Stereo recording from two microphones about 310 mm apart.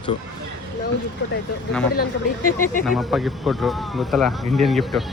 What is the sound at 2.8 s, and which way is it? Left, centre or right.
Speech, centre.